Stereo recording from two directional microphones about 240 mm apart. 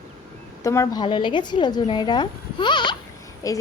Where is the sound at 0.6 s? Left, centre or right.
Centre.